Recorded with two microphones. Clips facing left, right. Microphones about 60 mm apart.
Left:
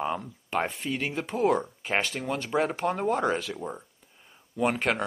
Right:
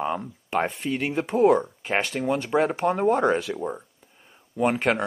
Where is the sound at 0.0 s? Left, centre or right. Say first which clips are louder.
Right 3 dB; centre.